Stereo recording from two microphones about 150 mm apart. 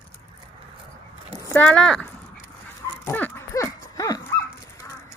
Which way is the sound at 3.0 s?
15° left (ahead or behind).